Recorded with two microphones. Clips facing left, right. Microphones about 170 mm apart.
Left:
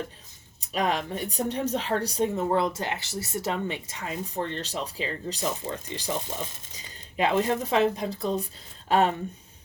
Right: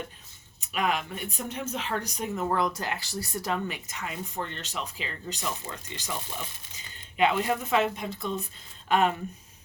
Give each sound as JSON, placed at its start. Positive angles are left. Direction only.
{"t": 0.6, "sound": "speech", "side_deg": 35}